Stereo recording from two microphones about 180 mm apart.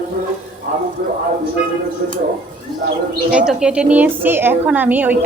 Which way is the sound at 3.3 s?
5° right (ahead or behind).